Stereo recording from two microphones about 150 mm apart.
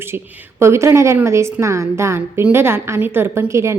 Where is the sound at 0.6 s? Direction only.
20° right (ahead or behind).